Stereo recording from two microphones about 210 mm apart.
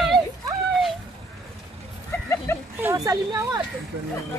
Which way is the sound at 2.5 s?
10° left (ahead or behind).